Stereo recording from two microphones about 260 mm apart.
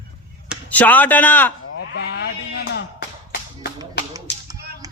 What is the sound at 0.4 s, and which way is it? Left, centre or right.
Speech, centre.